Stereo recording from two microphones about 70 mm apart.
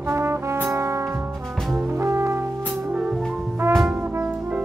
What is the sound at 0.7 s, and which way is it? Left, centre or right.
Music, right.